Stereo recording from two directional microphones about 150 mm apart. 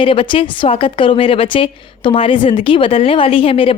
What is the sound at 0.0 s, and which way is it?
A woman's voice, 35° left (ahead or behind).